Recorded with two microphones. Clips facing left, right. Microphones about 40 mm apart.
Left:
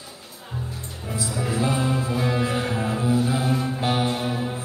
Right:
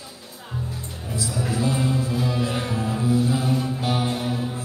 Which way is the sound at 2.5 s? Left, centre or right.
Left.